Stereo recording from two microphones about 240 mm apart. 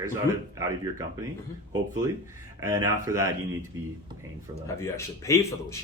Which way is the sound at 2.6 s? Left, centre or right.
Centre.